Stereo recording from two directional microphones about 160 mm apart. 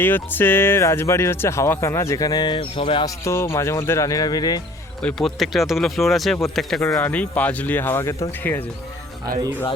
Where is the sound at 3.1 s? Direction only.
15° left (ahead or behind).